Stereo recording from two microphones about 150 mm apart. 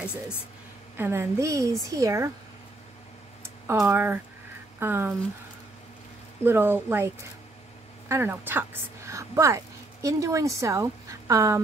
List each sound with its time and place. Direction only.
0.9 s a woman's voice: 15° right (ahead or behind)
3.6 s speech: 15° right (ahead or behind)
6.4 s speech: 15° right (ahead or behind)
8.1 s a woman's voice: 15° right (ahead or behind)